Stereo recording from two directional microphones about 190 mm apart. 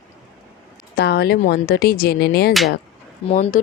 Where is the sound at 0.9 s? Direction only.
60° left (ahead or behind).